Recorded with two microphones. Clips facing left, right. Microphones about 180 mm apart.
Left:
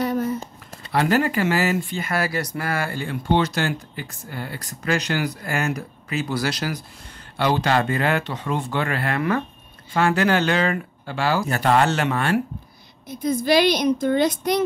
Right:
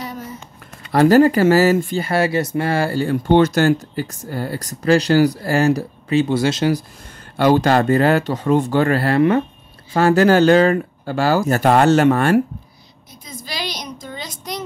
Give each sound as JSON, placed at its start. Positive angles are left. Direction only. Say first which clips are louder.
{"t": 0.0, "sound": "a sound", "louder": "left 8 dB", "side_deg": 55}
{"t": 0.9, "sound": "speech", "louder": "right 8 dB", "side_deg": -35}
{"t": 3.3, "sound": "speech", "louder": "right 7 dB", "side_deg": -50}
{"t": 7.3, "sound": "speech", "louder": "right 6 dB", "side_deg": -45}
{"t": 13.1, "sound": "a woman's voice", "louder": "left 15 dB", "side_deg": 55}